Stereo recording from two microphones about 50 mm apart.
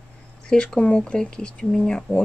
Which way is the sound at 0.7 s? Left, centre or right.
Left.